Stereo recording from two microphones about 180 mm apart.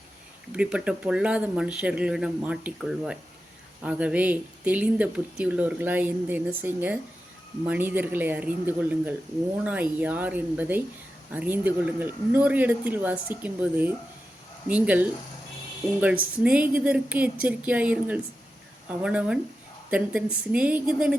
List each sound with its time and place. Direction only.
0.5 s speech: 5° right (ahead or behind)
16.4 s speech: 5° right (ahead or behind)